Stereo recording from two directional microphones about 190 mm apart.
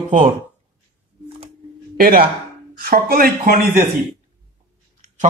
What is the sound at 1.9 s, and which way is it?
Speech, 50° right (ahead or behind).